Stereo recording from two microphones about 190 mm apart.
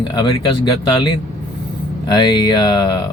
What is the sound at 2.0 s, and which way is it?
Speech, 20° left (ahead or behind).